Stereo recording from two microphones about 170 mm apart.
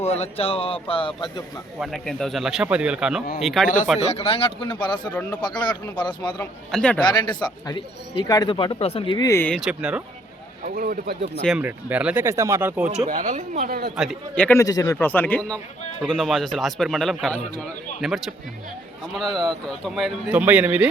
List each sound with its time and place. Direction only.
0.0 s speech: 35° left (ahead or behind)
1.8 s speech: centre (ahead or behind)
3.9 s a man's voice: 40° left (ahead or behind)
6.4 s speech: 5° left (ahead or behind)
7.0 s a man's voice: 25° left (ahead or behind)
9.4 s speech: centre (ahead or behind)
10.6 s speech: 55° right (ahead or behind)
11.6 s speech: 10° right (ahead or behind)
13.1 s speech: 50° right (ahead or behind)
13.9 s speech: centre (ahead or behind)
14.6 s a man's voice: 20° left (ahead or behind)
14.9 s speech: 10° left (ahead or behind); by 20.8 s 10° right (ahead or behind)